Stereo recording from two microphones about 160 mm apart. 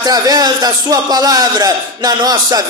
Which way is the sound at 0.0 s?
25° right (ahead or behind).